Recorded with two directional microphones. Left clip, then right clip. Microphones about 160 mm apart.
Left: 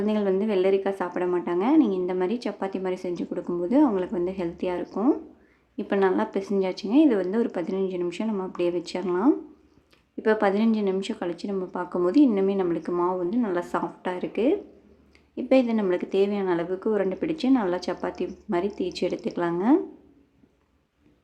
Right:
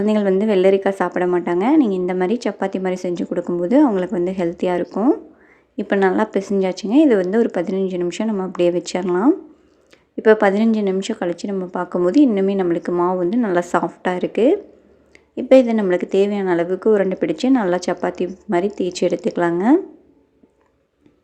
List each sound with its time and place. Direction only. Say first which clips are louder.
0.0 s a woman's voice: right 7 dB; 35° right (ahead or behind)
4.9 s a woman's voice: right 6 dB; 25° right (ahead or behind)